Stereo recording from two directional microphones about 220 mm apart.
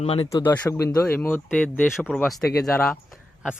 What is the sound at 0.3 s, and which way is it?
Speech, 10° left (ahead or behind).